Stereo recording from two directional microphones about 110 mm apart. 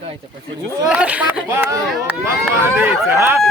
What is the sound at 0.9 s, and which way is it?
Speech, 10° right (ahead or behind).